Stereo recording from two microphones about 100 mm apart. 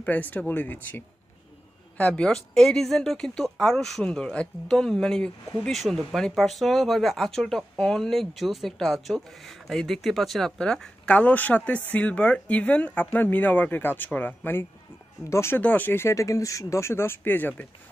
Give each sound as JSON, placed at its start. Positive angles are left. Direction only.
{"t": 0.0, "sound": "speech", "side_deg": 15}
{"t": 15.6, "sound": "speech", "side_deg": 15}